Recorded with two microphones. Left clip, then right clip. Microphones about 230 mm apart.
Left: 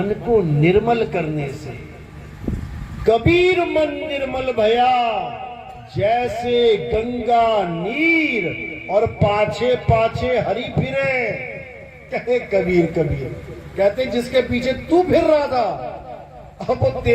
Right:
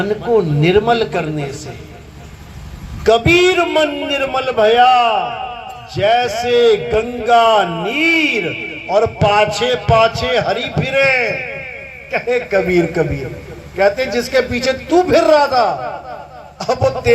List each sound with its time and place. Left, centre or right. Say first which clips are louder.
0.0 s a man's voice: right 3 dB; right
3.1 s a man's voice: right 4 dB; right